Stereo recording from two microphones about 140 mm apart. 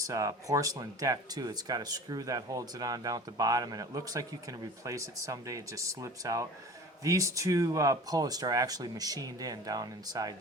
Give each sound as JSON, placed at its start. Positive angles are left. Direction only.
{"t": 0.0, "sound": "speech", "side_deg": -25}